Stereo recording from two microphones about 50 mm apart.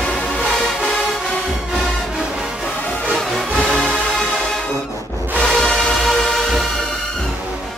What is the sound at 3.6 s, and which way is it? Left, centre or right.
Music, left.